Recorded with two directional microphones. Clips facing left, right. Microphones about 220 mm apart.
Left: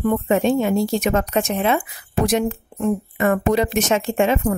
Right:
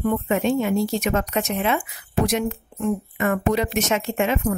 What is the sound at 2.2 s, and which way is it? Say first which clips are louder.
Speech: left 3 dB; 45° left (ahead or behind).